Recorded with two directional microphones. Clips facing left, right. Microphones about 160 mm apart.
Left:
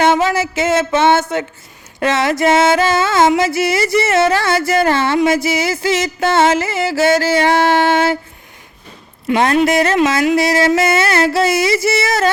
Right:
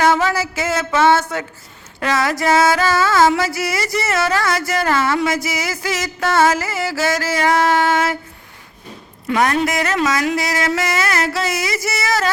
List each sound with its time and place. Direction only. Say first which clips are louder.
0.0 s music: left 3 dB; 25° left (ahead or behind)
9.2 s music: left 4 dB; 25° left (ahead or behind)